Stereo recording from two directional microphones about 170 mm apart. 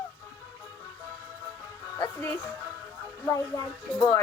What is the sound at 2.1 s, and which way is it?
Speech, 15° left (ahead or behind).